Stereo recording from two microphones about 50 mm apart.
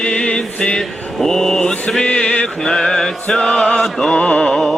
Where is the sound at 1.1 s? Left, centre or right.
Centre.